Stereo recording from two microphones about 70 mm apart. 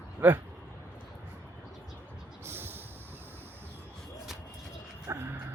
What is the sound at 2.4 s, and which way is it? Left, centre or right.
Vehicle, right.